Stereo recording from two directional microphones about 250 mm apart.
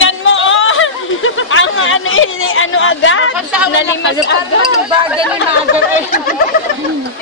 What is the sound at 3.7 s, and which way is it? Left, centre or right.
Speech, left.